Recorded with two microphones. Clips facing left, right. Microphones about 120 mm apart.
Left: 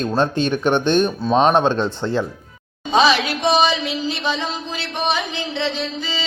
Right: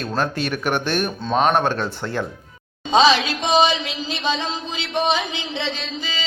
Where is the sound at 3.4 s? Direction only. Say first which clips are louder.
Left 1 dB; 15° right (ahead or behind).